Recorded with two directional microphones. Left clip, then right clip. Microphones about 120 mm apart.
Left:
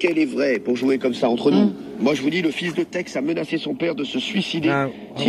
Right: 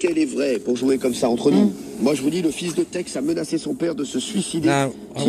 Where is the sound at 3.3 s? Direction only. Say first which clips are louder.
Even; 60° left (ahead or behind).